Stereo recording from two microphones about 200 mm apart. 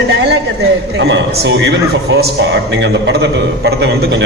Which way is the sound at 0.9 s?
65° right (ahead or behind).